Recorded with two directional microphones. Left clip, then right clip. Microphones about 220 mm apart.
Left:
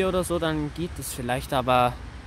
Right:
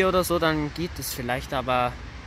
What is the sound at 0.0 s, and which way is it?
Speech, 5° left (ahead or behind).